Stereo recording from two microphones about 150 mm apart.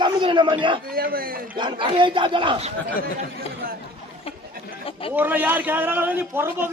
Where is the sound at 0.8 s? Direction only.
85° right.